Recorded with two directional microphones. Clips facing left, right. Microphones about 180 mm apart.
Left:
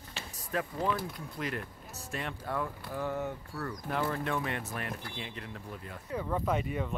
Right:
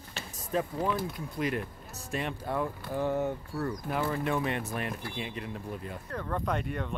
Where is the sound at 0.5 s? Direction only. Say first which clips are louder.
Right 2 dB; 25° right (ahead or behind).